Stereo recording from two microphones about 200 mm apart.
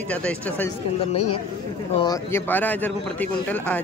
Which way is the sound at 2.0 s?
15° left (ahead or behind).